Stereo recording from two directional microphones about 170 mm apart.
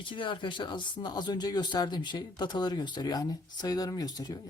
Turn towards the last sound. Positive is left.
turn(degrees=20)  # may be behind; listen again after turning